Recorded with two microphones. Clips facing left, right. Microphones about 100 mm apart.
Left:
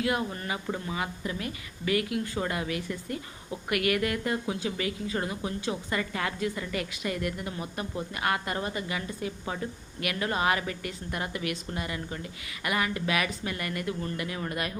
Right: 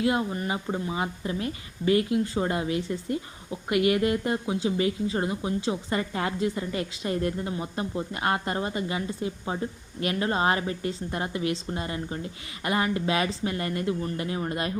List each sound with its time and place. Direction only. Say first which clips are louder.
0.0 s a woman's voice: right 4 dB; 25° right (ahead or behind)